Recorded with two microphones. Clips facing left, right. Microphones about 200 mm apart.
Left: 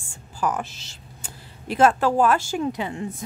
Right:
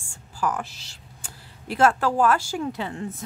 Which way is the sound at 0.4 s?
20° left (ahead or behind).